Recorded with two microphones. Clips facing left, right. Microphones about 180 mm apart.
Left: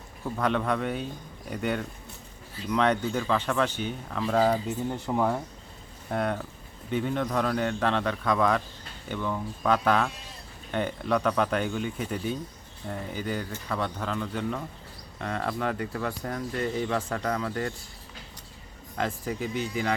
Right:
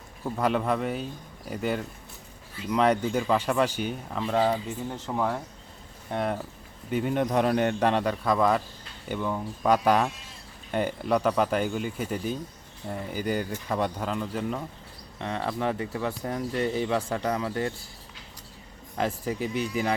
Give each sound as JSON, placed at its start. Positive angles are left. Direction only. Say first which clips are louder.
{"t": 0.3, "sound": "speech", "louder": "right 1 dB", "side_deg": -10}
{"t": 4.4, "sound": "speech", "louder": "left 1 dB", "side_deg": 5}
{"t": 15.6, "sound": "speech", "louder": "right 1 dB", "side_deg": -25}
{"t": 18.9, "sound": "speech", "louder": "right 2 dB", "side_deg": -10}